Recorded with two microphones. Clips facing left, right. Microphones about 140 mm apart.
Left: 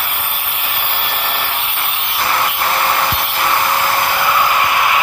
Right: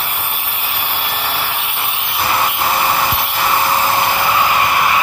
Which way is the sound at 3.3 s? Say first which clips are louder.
Right 1 dB; 10° right (ahead or behind).